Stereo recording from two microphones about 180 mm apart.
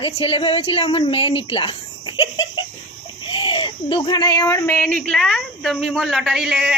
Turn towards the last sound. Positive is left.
turn(degrees=0)  # may be behind; listen again after turning